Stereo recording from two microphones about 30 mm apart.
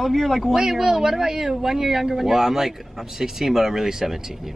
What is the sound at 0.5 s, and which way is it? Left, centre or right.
A woman's voice, right.